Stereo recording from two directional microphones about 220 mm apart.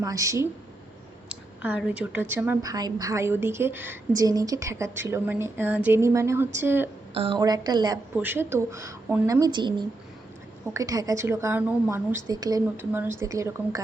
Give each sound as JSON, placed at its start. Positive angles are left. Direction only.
{"t": 0.0, "sound": "a woman's voice", "side_deg": -15}
{"t": 1.6, "sound": "a woman's voice", "side_deg": -5}
{"t": 7.1, "sound": "a woman's voice", "side_deg": -25}